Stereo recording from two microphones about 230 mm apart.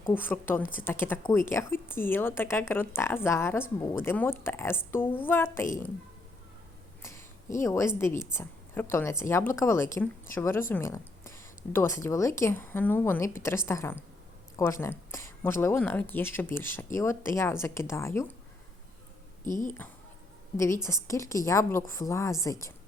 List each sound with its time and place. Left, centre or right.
0.0 s a woman's voice: centre
7.0 s a sound: centre
8.2 s a woman's voice: centre
19.5 s speech: left
20.6 s a woman's voice: centre